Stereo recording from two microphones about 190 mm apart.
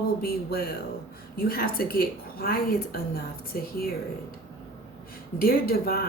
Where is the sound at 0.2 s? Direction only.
55° left (ahead or behind).